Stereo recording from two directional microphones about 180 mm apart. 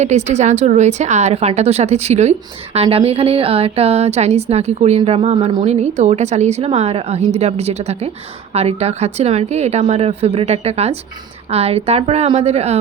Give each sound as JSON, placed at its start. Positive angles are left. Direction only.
{"t": 0.0, "sound": "a woman's voice", "side_deg": -40}